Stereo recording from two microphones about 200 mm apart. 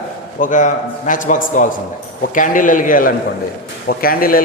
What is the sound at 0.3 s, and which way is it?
A man's voice, 40° left (ahead or behind).